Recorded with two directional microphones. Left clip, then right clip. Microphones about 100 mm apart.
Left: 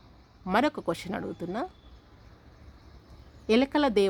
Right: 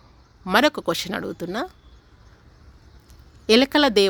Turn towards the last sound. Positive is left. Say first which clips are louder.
# right 7 dB
turn(degrees=-25)  # may be behind; listen again after turning